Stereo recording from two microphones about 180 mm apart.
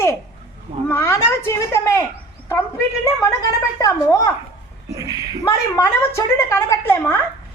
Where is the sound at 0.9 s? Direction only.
15° left (ahead or behind).